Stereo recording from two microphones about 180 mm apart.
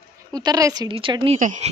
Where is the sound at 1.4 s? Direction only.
45° right (ahead or behind).